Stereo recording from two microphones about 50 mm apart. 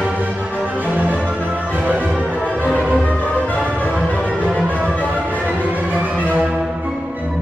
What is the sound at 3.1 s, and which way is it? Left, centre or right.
Music, left.